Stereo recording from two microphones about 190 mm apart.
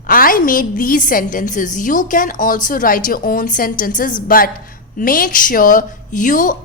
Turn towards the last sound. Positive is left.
turn(degrees=45)  # may be behind; listen again after turning